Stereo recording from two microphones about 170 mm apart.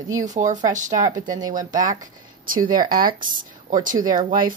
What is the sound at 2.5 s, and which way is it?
Speech, 55° right (ahead or behind).